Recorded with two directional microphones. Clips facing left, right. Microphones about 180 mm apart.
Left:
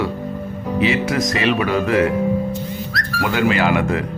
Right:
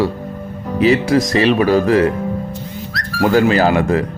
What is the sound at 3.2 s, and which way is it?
Speech, 35° right (ahead or behind).